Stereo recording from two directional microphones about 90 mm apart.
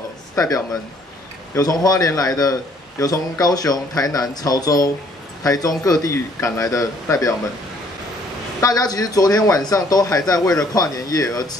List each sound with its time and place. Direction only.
0.4 s speech: 40° left (ahead or behind)
8.5 s speech: 45° left (ahead or behind)